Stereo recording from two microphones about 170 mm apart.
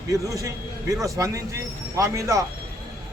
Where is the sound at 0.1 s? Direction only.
20° right (ahead or behind).